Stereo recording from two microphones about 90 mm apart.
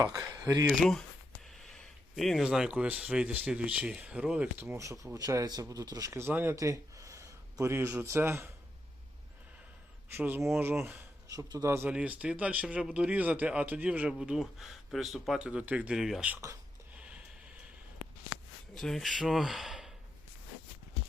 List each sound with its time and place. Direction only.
0.4 s speech: 40° right (ahead or behind)
0.7 s speech: 5° left (ahead or behind)
1.5 s a sound: 5° left (ahead or behind)
2.5 s speech: 10° right (ahead or behind)
5.1 s speech: 40° right (ahead or behind)
6.6 s a sound: 35° right (ahead or behind)
8.0 s speech: 30° right (ahead or behind)
10.2 s speech: 20° right (ahead or behind)
11.3 s speech: 40° right (ahead or behind)
11.9 s speech: 15° right (ahead or behind)
14.2 s speech: 5° right (ahead or behind)
16.0 s speech: 5° right (ahead or behind)
17.0 s a sound: 15° right (ahead or behind)
18.7 s speech: 5° left (ahead or behind)